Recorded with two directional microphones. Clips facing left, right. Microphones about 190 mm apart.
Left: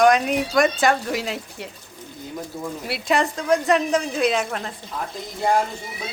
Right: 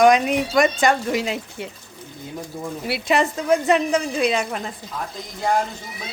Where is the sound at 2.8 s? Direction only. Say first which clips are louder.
Right 2 dB; centre (ahead or behind).